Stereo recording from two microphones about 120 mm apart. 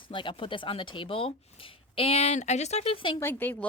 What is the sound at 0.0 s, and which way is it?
Speech, 45° left (ahead or behind).